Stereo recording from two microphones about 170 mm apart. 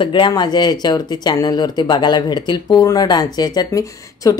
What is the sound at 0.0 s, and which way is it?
Speech, 30° left (ahead or behind).